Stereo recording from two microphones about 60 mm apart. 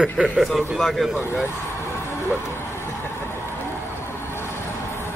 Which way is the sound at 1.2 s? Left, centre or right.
Left.